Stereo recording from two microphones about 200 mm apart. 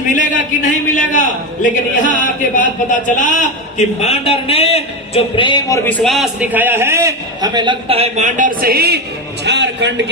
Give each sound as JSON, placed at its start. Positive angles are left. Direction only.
{"t": 0.1, "sound": "a man's voice", "side_deg": 40}